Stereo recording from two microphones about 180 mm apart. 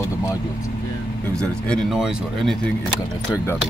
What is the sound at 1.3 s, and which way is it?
Speech, 5° left (ahead or behind).